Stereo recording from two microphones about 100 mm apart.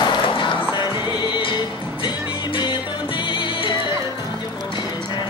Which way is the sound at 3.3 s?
50° left (ahead or behind).